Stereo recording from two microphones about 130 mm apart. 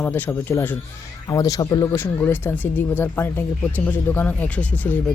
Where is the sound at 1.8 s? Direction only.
20° left (ahead or behind).